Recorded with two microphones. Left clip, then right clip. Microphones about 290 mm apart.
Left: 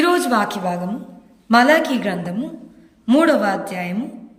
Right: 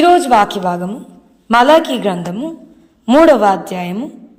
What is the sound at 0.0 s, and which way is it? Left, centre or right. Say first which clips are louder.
A woman's voice: right 8 dB; centre.